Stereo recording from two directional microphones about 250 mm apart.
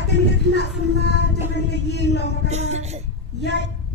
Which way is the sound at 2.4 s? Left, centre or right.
Right.